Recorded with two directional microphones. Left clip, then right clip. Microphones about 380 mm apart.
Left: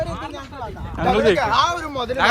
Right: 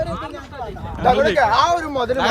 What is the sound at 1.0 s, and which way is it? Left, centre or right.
Speech, right.